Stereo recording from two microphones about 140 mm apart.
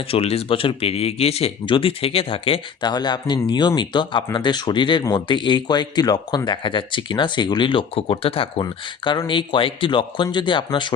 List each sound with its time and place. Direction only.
0.1 s speech: 45° left (ahead or behind)
8.6 s speech: 30° left (ahead or behind)